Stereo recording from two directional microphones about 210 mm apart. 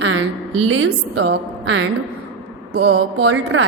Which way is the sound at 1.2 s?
55° right (ahead or behind).